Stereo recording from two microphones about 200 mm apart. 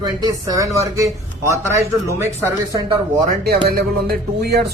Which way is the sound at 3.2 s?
50° right (ahead or behind).